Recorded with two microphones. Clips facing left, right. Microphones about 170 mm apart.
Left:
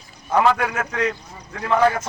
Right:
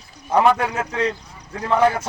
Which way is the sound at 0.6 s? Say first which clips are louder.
Right 1 dB; 25° right (ahead or behind).